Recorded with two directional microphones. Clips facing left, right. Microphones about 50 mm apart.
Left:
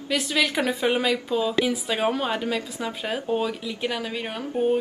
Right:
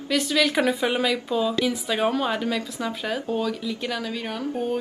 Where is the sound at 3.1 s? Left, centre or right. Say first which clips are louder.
Left 2 dB; left.